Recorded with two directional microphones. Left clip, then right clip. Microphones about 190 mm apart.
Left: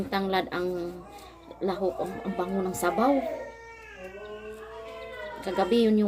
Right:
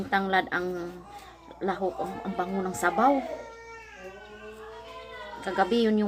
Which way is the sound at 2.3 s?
25° right (ahead or behind).